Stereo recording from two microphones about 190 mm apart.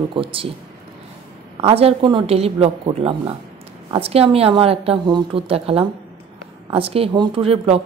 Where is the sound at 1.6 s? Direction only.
30° right (ahead or behind).